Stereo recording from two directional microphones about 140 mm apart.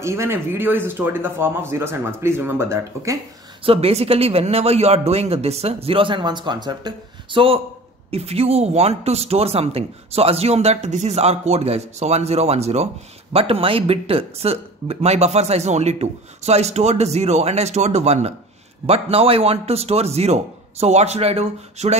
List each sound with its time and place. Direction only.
0.0 s a man's voice: 20° right (ahead or behind)
3.6 s speech: 45° right (ahead or behind)